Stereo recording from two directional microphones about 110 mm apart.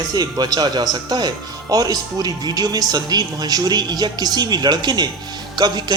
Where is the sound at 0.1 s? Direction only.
35° right (ahead or behind).